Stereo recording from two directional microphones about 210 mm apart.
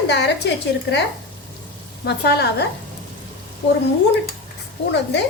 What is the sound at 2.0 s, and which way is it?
Speech, 50° left (ahead or behind).